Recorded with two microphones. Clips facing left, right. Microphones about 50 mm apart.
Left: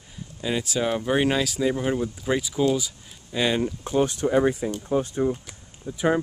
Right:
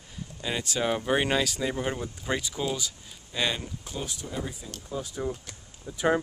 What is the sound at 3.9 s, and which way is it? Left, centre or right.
Speech, left.